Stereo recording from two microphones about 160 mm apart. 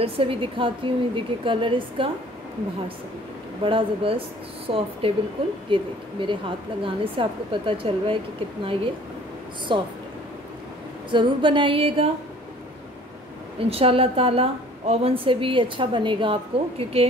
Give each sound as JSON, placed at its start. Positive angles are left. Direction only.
{"t": 0.0, "sound": "a woman's voice", "side_deg": -35}
{"t": 3.6, "sound": "a woman's voice", "side_deg": -35}
{"t": 9.7, "sound": "a woman's voice", "side_deg": -30}
{"t": 11.1, "sound": "a woman's voice", "side_deg": -30}
{"t": 13.7, "sound": "a woman's voice", "side_deg": -35}